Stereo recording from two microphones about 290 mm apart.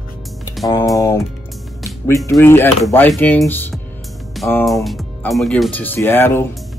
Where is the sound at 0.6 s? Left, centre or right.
Centre.